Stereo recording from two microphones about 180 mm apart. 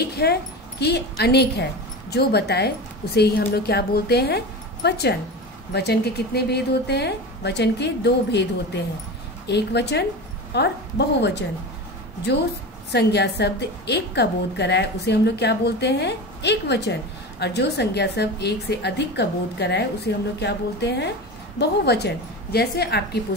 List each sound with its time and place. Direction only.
0.1 s a woman's voice: 65° left (ahead or behind)
12.9 s a woman's voice: 70° left (ahead or behind)